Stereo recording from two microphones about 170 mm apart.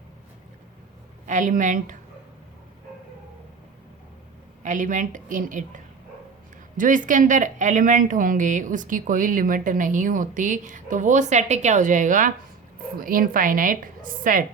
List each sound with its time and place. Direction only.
1.3 s speech: 50° right (ahead or behind)
4.6 s speech: 50° right (ahead or behind)